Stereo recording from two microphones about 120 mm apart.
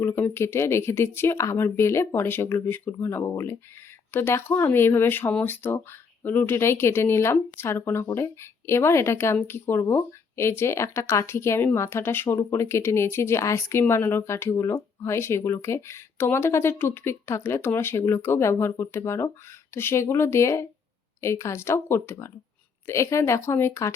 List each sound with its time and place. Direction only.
0.0 s speech: 20° left (ahead or behind)